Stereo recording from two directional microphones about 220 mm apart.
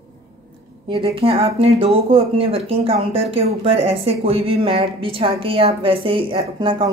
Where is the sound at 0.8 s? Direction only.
25° right (ahead or behind).